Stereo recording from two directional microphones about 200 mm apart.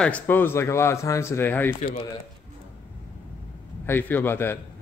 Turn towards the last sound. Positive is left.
turn(degrees=10)  # may be behind; listen again after turning